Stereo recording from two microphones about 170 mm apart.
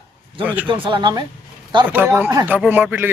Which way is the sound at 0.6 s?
30° right (ahead or behind).